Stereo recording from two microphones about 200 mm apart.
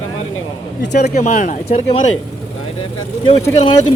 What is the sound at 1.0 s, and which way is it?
Speech, 35° left (ahead or behind).